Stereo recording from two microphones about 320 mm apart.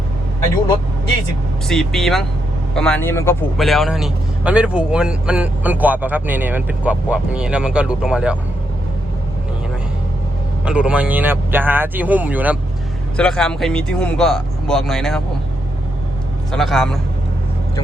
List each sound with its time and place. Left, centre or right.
1.6 s speech: centre
10.7 s speech: centre
16.5 s speech: centre